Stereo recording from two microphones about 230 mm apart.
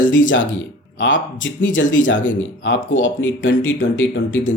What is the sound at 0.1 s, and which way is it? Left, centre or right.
Speech, left.